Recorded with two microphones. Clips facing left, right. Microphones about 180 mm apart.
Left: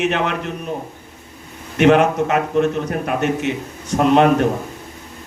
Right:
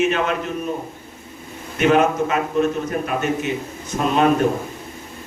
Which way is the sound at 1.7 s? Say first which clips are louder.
Left 3 dB; 70° left (ahead or behind).